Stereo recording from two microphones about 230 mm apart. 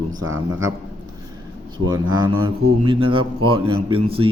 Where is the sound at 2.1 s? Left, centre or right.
Right.